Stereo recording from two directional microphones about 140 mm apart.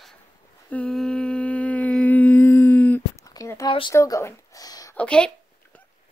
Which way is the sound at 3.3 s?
20° left (ahead or behind).